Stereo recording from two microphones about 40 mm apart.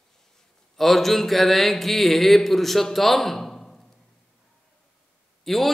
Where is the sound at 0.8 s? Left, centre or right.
Centre.